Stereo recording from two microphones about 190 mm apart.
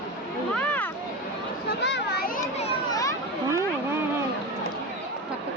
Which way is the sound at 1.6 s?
60° left (ahead or behind).